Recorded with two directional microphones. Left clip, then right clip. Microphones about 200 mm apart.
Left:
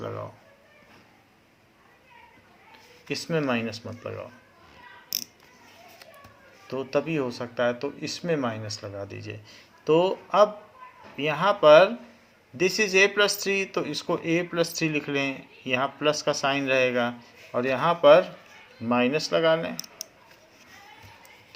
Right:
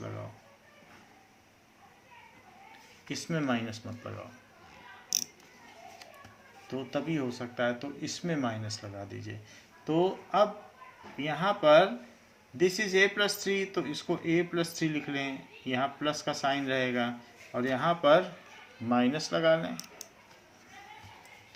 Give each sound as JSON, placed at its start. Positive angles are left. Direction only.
{"t": 3.1, "sound": "speech", "side_deg": 40}
{"t": 6.7, "sound": "speech", "side_deg": 40}